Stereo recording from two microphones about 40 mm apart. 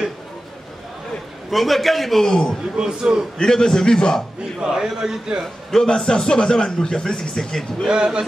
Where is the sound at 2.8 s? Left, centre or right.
Right.